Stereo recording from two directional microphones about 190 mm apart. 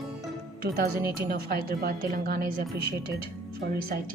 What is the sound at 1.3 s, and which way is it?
A woman's voice, 55° right (ahead or behind).